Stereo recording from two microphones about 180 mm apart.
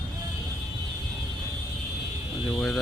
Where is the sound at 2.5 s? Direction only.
Centre (ahead or behind).